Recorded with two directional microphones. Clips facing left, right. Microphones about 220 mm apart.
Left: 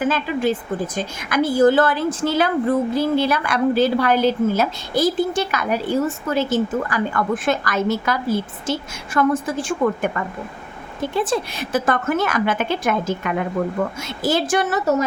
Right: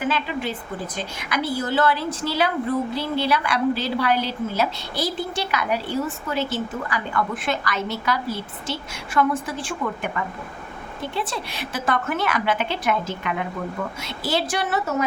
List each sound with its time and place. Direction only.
0.9 s a woman's voice: 50° left (ahead or behind)